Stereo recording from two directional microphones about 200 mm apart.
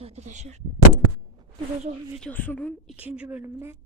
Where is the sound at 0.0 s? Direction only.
35° right (ahead or behind).